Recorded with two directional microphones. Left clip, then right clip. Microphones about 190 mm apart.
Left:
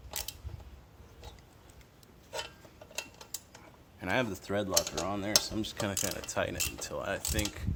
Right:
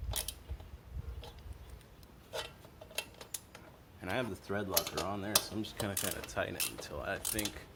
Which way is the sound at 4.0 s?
60° left (ahead or behind).